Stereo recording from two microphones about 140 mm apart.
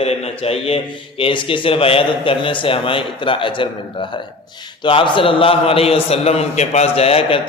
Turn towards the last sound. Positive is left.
turn(degrees=40)  # may be behind; listen again after turning